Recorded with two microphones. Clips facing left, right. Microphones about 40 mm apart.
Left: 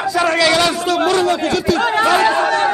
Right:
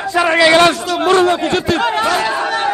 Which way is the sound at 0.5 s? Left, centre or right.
Right.